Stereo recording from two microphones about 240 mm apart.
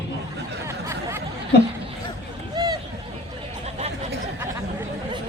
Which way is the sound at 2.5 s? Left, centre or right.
Centre.